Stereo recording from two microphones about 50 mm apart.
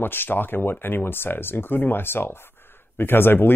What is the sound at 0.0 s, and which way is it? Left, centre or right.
Speech, left.